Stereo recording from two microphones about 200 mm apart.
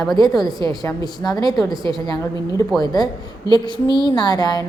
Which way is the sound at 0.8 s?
20° left (ahead or behind).